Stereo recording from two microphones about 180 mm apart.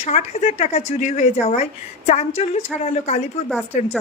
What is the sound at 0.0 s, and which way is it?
Speech, 35° left (ahead or behind).